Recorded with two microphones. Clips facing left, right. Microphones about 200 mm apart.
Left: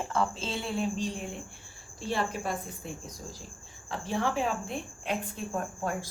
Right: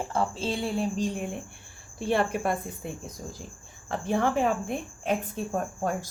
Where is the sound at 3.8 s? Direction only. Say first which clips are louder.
Right 5 dB; 55° right (ahead or behind).